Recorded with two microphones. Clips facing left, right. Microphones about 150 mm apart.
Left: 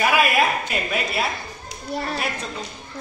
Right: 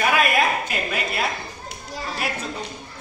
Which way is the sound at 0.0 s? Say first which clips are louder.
Left 1 dB; 5° left (ahead or behind).